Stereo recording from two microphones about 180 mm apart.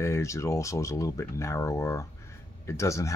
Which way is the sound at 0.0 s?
15° left (ahead or behind).